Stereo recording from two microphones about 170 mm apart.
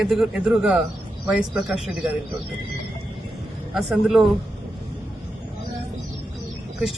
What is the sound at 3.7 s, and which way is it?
Speech, 5° right (ahead or behind).